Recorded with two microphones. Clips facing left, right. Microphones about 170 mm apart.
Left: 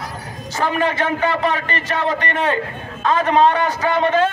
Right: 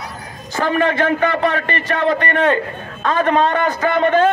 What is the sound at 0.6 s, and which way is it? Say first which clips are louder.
A man's voice: right 3 dB; 40° right (ahead or behind).